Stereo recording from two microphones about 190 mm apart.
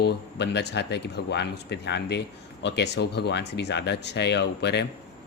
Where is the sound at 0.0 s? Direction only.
60° left (ahead or behind).